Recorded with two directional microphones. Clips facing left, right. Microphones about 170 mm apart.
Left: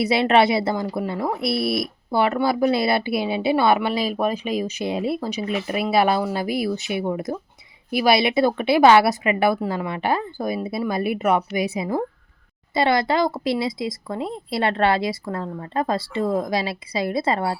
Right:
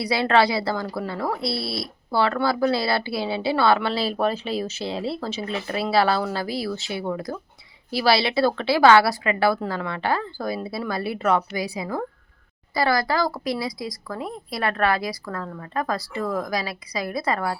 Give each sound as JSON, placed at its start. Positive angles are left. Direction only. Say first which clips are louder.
{"t": 0.0, "sound": "speech", "louder": "left 3 dB", "side_deg": 25}